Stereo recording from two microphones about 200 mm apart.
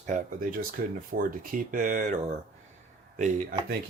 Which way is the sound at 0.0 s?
40° right (ahead or behind).